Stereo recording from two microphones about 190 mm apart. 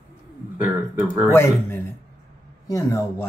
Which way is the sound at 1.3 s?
15° left (ahead or behind).